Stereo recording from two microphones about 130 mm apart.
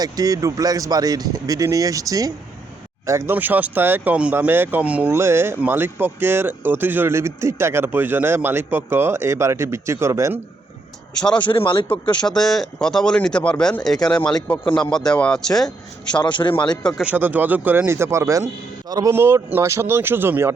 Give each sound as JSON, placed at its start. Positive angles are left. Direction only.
{"t": 0.0, "sound": "speech", "side_deg": -30}
{"t": 11.1, "sound": "speech", "side_deg": 5}
{"t": 11.3, "sound": "speech", "side_deg": 40}
{"t": 12.2, "sound": "speech", "side_deg": 5}
{"t": 16.2, "sound": "speech", "side_deg": 40}
{"t": 17.0, "sound": "speech", "side_deg": -15}
{"t": 19.1, "sound": "speech", "side_deg": -20}